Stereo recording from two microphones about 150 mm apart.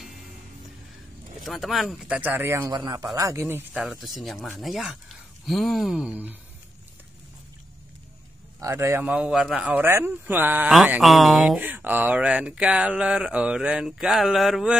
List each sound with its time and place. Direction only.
1.4 s speech: centre (ahead or behind)
2.7 s speech: 25° right (ahead or behind)
3.7 s speech: centre (ahead or behind)
8.5 s speech: 20° right (ahead or behind)
9.1 s speech: 5° right (ahead or behind)
10.9 s speech: centre (ahead or behind)
11.6 s speech: 10° right (ahead or behind)